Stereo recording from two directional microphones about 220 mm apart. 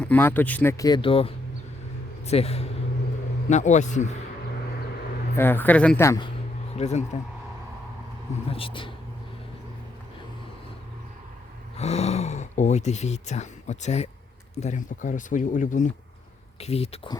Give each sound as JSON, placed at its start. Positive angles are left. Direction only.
{"t": 0.0, "sound": "speech", "side_deg": 10}
{"t": 5.4, "sound": "speech", "side_deg": 10}
{"t": 6.7, "sound": "speech", "side_deg": 30}
{"t": 8.4, "sound": "speech", "side_deg": 25}
{"t": 11.8, "sound": "speech", "side_deg": 30}